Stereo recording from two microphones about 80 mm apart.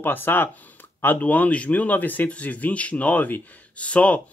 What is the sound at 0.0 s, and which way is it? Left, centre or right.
Speech, left.